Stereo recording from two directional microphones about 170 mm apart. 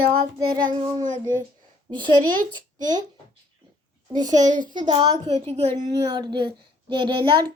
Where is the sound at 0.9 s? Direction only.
45° right (ahead or behind).